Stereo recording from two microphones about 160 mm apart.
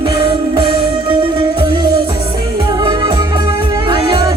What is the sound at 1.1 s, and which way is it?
Speech, 30° right (ahead or behind).